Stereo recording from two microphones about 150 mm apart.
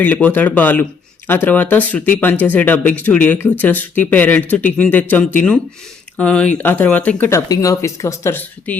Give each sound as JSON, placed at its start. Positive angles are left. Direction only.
{"t": 0.0, "sound": "speech", "side_deg": 10}